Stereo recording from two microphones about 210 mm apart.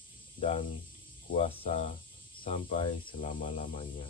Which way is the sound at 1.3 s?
30° left (ahead or behind).